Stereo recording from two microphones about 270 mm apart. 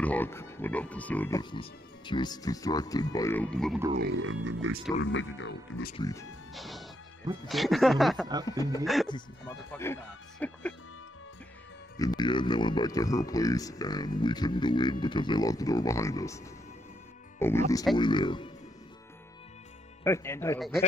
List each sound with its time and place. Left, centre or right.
0.0 s speech: centre
4.1 s speech: right
5.0 s speech: left
5.9 s speech: centre
6.5 s speech: centre
8.5 s speech: centre
8.8 s speech: centre
9.1 s speech: centre
12.0 s speech: centre
17.4 s speech: centre
20.0 s speech: centre